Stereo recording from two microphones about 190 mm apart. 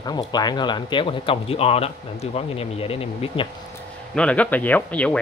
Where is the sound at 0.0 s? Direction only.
20° left (ahead or behind).